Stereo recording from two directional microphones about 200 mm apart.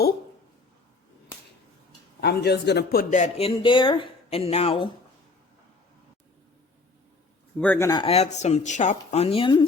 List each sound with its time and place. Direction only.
2.2 s speech: 55° left (ahead or behind); by 4.9 s 30° left (ahead or behind)
7.6 s speech: 10° left (ahead or behind)